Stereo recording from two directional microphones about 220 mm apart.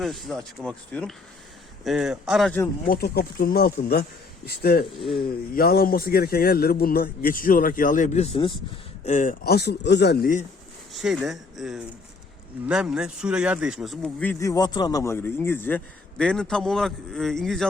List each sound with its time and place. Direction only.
0.0 s speech: centre (ahead or behind)
2.8 s a man's voice: 40° left (ahead or behind); by 8.5 s 25° left (ahead or behind)
9.0 s a man's voice: 35° left (ahead or behind)
10.9 s speech: centre (ahead or behind)